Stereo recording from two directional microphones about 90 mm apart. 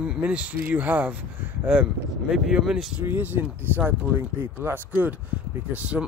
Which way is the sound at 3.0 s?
20° right (ahead or behind).